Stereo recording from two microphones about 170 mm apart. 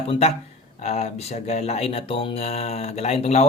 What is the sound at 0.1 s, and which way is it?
Speech, 40° left (ahead or behind).